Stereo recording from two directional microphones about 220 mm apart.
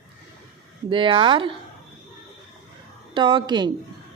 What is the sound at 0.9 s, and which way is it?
Speech, 20° right (ahead or behind).